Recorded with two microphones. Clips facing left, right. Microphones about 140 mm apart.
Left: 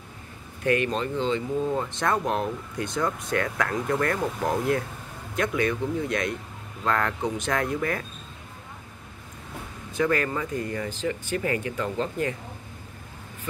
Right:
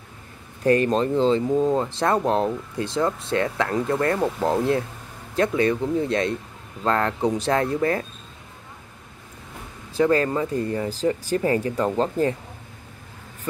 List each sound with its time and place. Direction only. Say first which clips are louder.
0.7 s speech: right 6 dB; 35° right (ahead or behind)
9.9 s speech: right 5 dB; 30° right (ahead or behind)